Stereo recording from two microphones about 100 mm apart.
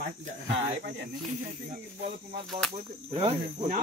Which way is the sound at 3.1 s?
65° right (ahead or behind).